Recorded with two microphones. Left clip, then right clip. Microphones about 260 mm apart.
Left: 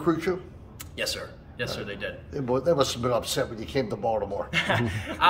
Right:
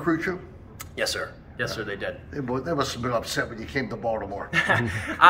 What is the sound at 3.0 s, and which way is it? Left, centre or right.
Speech, left.